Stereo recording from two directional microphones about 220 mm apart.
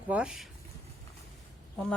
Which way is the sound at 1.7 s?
5° left (ahead or behind).